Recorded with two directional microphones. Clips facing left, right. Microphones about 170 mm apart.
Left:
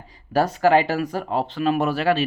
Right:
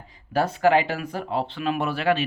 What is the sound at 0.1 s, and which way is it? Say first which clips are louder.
Speech: left 3 dB; 40° left (ahead or behind).